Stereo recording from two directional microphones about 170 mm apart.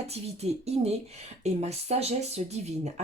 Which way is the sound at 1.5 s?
40° right (ahead or behind).